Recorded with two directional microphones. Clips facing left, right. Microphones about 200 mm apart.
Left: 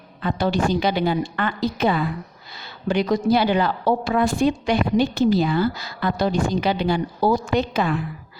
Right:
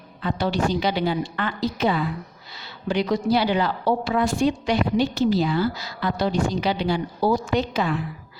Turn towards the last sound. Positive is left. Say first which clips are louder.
# left 2 dB
turn(degrees=55)  # may be behind; listen again after turning